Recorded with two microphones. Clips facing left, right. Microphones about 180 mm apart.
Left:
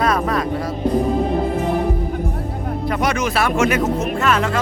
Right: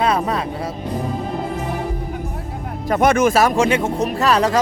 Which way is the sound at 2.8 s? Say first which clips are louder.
Right 6 dB; 45° right (ahead or behind).